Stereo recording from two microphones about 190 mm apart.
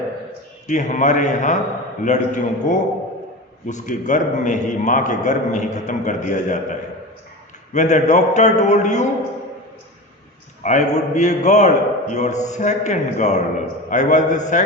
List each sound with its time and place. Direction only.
0.7 s a man's voice: 40° left (ahead or behind)
10.6 s a man's voice: 40° left (ahead or behind)